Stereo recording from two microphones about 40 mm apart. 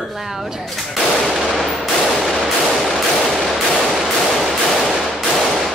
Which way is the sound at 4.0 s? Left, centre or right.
Centre.